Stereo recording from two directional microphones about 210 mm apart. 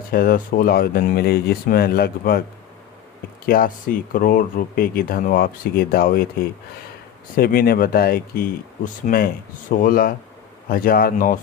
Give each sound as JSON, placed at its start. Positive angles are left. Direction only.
{"t": 0.1, "sound": "speech", "side_deg": 45}
{"t": 3.4, "sound": "speech", "side_deg": 45}
{"t": 7.3, "sound": "speech", "side_deg": 45}